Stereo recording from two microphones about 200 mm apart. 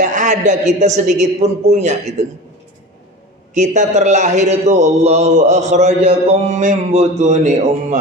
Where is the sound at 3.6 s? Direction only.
35° right (ahead or behind).